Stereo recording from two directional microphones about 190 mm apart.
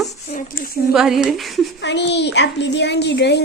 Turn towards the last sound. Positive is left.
turn(degrees=60)  # may be behind; listen again after turning